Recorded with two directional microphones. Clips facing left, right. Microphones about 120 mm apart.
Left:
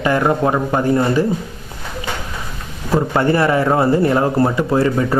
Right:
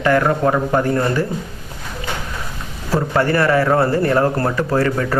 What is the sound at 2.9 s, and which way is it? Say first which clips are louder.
Speech: left 2 dB; 20° left (ahead or behind).